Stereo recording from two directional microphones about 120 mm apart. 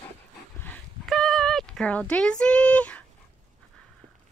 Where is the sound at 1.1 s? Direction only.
Centre (ahead or behind).